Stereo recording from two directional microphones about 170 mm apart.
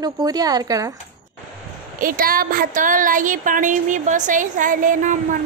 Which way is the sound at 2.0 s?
55° right (ahead or behind).